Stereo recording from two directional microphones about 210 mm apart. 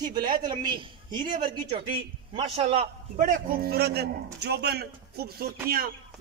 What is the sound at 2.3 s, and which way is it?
A man's voice, 25° right (ahead or behind).